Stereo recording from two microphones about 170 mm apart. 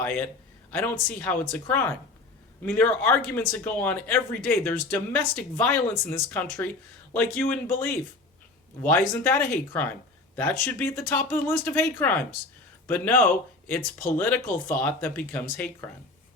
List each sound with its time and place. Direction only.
0.0 s speech: 10° left (ahead or behind)